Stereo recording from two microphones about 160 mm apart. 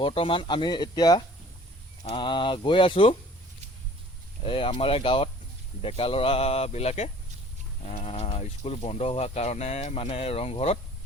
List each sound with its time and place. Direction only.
0.0 s speech: 35° left (ahead or behind)
4.4 s speech: 35° left (ahead or behind)